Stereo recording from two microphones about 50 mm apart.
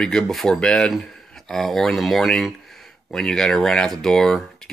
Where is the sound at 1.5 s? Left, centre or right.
Centre.